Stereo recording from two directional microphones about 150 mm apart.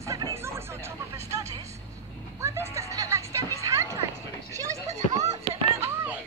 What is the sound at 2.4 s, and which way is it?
Music, 20° right (ahead or behind).